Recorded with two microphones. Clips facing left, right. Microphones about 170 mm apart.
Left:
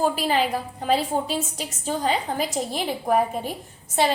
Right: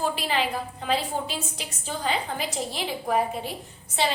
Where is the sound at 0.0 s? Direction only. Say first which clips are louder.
Left 4 dB; 40° left (ahead or behind).